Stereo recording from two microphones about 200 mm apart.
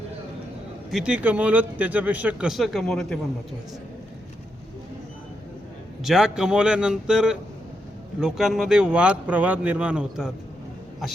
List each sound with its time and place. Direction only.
0.9 s speech: 5° right (ahead or behind)
6.0 s speech: centre (ahead or behind)